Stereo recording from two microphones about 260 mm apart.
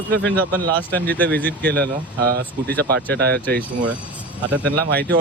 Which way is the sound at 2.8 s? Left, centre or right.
Right.